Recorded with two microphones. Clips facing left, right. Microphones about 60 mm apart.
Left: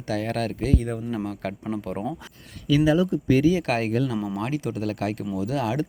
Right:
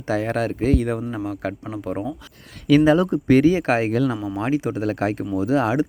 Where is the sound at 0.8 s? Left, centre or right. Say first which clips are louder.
Right 6 dB; right.